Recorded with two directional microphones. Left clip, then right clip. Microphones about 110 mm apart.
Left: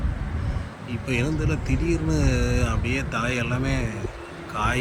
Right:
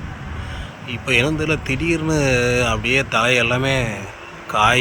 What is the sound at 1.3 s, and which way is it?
Speech, 25° right (ahead or behind).